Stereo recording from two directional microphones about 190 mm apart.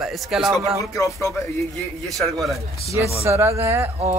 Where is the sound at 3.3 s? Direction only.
15° right (ahead or behind).